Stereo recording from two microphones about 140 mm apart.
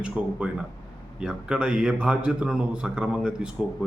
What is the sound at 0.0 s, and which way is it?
A man's voice, 5° right (ahead or behind).